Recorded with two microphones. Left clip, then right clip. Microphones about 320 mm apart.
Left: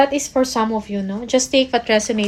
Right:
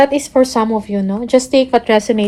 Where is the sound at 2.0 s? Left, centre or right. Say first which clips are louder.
Right 5 dB; right.